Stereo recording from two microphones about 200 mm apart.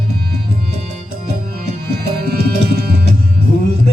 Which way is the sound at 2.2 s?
50° right (ahead or behind).